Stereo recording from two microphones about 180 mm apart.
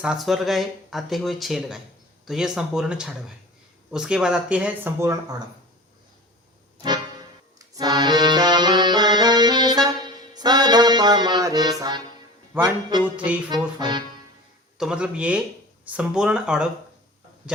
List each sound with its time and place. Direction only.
0.0 s speech: centre (ahead or behind)
7.8 s accordion: 25° right (ahead or behind)
13.1 s speech: 10° right (ahead or behind)
13.5 s music: 25° right (ahead or behind)
14.8 s speech: 5° right (ahead or behind)